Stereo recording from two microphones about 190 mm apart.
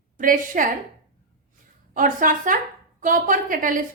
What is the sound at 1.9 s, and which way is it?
A woman's voice, 45° right (ahead or behind).